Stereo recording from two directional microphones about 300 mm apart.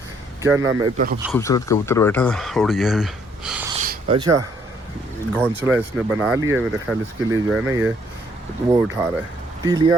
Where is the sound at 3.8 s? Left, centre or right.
Right.